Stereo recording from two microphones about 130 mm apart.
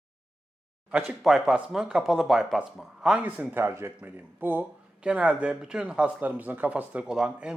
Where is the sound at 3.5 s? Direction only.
20° right (ahead or behind).